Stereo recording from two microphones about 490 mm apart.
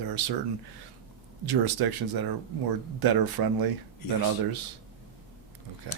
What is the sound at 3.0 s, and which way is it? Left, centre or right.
Speech, right.